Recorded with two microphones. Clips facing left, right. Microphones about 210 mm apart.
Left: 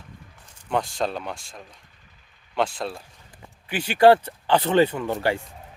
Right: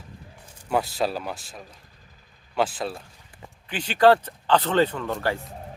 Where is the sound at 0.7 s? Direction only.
5° right (ahead or behind).